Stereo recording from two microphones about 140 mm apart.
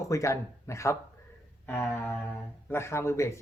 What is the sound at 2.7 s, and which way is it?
Speech, 20° left (ahead or behind).